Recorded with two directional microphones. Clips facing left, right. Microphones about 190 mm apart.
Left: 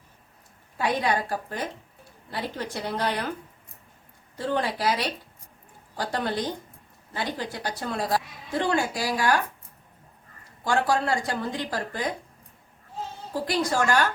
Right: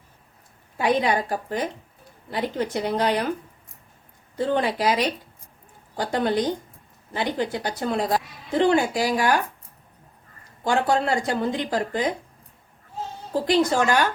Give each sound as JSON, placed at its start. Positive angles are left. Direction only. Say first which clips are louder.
{"t": 0.8, "sound": "speech", "louder": "right 4 dB", "side_deg": -15}
{"t": 4.4, "sound": "a woman's voice", "louder": "right 4 dB", "side_deg": -20}
{"t": 10.6, "sound": "a woman's voice", "louder": "right 3 dB", "side_deg": -20}
{"t": 13.5, "sound": "a woman's voice", "louder": "right 4 dB", "side_deg": -20}